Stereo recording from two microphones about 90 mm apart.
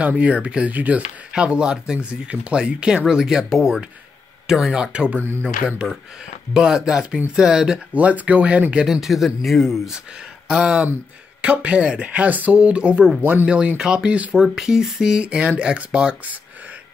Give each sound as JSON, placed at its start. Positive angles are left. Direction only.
{"t": 0.0, "sound": "speech", "side_deg": -15}
{"t": 8.8, "sound": "speech", "side_deg": -5}